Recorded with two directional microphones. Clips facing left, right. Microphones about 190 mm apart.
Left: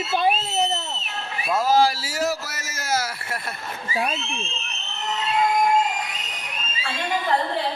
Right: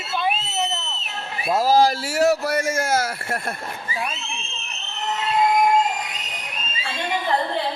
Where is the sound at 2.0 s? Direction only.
65° right (ahead or behind).